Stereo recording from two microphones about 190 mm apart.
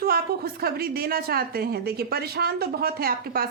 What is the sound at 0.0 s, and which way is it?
A woman's voice, 55° right (ahead or behind).